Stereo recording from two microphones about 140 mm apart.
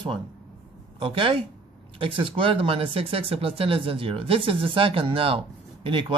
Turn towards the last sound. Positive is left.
turn(degrees=-35)  # may be behind; listen again after turning